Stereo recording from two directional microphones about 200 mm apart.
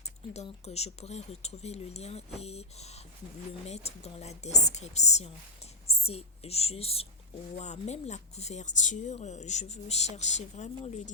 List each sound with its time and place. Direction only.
0.3 s speech: 30° left (ahead or behind)